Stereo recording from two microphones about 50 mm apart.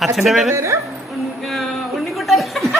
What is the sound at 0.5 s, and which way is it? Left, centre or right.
Speech, right.